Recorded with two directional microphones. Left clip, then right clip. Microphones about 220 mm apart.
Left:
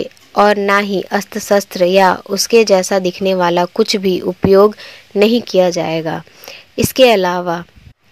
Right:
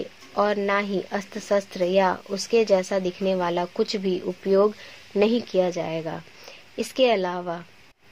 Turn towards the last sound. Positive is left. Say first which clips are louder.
# left 11 dB
turn(degrees=25)  # may be behind; listen again after turning